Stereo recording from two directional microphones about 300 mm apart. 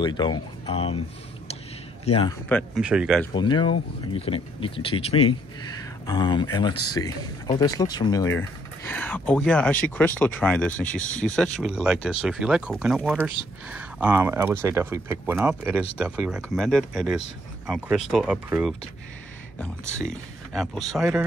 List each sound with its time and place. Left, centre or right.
0.0 s speech: centre
2.0 s speech: centre
2.5 s speech: centre
3.3 s speech: centre
19.8 s speech: centre